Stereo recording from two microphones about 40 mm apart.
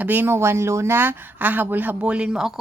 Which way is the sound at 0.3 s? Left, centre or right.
Right.